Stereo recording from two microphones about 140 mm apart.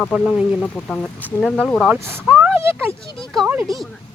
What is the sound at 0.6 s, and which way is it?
Speech, 5° left (ahead or behind).